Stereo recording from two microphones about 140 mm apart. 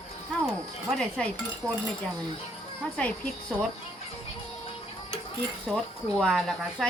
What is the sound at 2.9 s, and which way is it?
Speech, 10° left (ahead or behind).